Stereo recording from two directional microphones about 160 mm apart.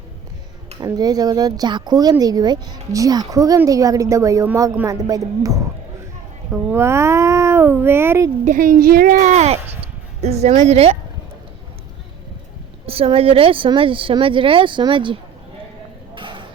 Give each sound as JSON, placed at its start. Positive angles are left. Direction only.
{"t": 0.8, "sound": "speech", "side_deg": -25}
{"t": 8.4, "sound": "a woman's voice", "side_deg": -55}
{"t": 9.2, "sound": "speech", "side_deg": -45}
{"t": 12.8, "sound": "a woman's voice", "side_deg": -35}